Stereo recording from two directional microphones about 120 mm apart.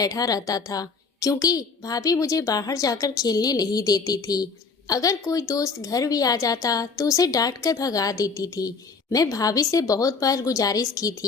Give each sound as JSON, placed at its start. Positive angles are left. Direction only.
{"t": 0.0, "sound": "a woman's voice", "side_deg": 30}